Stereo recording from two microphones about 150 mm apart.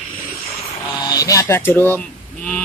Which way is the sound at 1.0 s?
25° left (ahead or behind).